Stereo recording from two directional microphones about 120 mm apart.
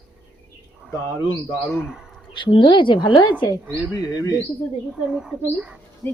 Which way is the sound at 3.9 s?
30° left (ahead or behind).